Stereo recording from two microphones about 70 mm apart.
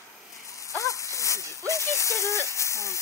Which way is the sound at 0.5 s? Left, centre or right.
Left.